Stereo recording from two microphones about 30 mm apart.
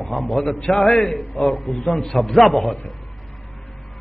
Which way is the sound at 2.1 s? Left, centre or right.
Centre.